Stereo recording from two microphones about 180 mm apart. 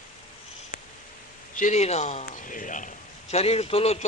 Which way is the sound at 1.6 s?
40° left (ahead or behind).